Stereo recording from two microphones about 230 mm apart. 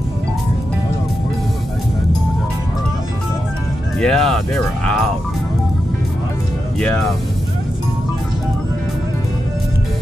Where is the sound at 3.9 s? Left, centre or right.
Centre.